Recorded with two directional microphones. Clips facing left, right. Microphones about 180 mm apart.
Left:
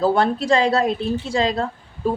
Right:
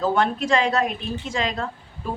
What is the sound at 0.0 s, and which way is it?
A woman's voice, 35° left (ahead or behind).